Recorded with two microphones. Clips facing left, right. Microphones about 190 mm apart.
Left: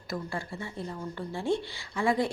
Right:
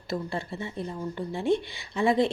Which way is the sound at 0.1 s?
25° right (ahead or behind).